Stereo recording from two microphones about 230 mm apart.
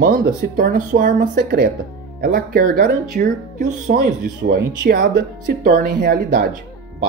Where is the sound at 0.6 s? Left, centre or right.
Right.